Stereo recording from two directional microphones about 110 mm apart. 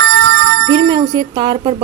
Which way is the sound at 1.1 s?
45° right (ahead or behind).